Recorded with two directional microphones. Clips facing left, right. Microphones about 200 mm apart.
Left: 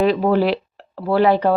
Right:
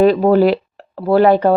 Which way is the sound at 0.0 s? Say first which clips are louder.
Right 5 dB; 45° right (ahead or behind).